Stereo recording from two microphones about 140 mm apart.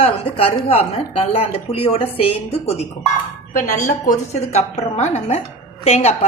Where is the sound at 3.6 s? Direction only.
65° left (ahead or behind).